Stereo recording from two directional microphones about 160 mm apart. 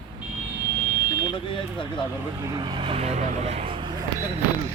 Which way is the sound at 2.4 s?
25° right (ahead or behind).